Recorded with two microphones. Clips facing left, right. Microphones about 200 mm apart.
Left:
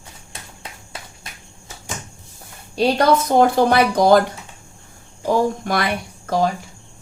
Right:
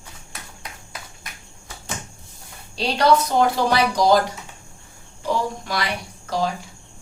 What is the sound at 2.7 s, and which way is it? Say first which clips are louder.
Speech: left 2 dB; 50° left (ahead or behind).